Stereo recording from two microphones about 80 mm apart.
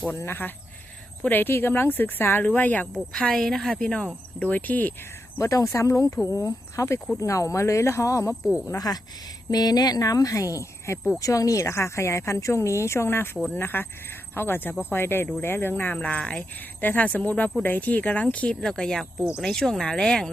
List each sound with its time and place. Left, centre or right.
0.1 s speech: left
2.8 s speech: centre; by 4.9 s left
5.4 s speech: left
8.9 s speech: left; by 18.5 s centre
18.6 s speech: centre